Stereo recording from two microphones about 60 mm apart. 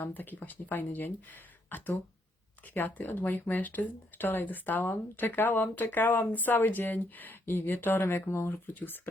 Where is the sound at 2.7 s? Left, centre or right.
Left.